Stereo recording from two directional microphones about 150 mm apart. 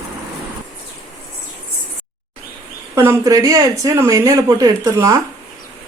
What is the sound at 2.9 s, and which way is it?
Speech, 20° right (ahead or behind).